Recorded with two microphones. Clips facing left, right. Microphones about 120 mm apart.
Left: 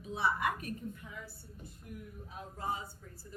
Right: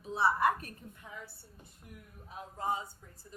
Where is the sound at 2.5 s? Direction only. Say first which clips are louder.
Right 3 dB; 25° right (ahead or behind).